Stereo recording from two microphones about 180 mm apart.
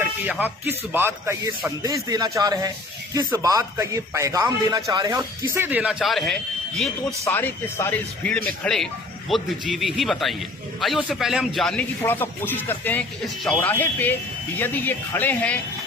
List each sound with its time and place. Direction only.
0.0 s speech: 10° right (ahead or behind)
7.3 s a man's voice: 10° left (ahead or behind)